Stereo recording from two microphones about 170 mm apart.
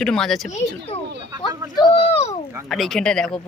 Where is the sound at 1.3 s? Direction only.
25° right (ahead or behind).